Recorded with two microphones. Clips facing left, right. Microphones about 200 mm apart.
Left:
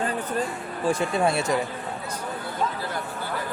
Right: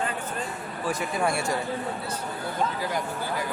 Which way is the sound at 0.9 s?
25° left (ahead or behind).